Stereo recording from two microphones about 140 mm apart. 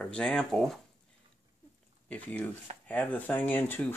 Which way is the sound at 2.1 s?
10° left (ahead or behind).